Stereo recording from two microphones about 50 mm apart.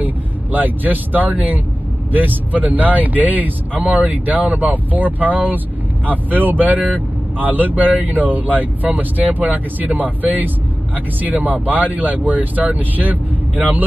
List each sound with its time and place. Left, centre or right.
0.0 s speech: right